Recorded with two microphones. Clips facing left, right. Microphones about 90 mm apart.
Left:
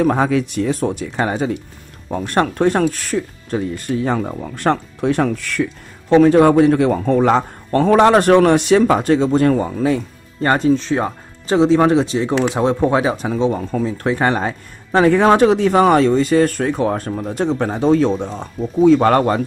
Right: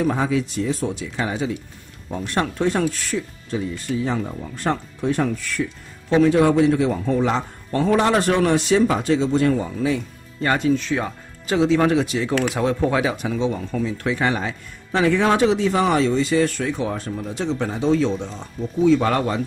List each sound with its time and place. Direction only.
0.0 s speech: 60° left (ahead or behind)